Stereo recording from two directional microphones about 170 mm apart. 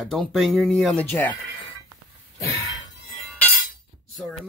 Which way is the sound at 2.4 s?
20° left (ahead or behind).